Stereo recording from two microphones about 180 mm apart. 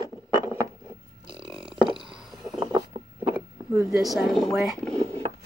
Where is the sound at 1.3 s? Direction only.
25° right (ahead or behind).